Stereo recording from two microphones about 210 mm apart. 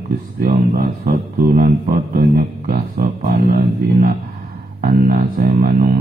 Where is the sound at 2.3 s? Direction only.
45° right (ahead or behind).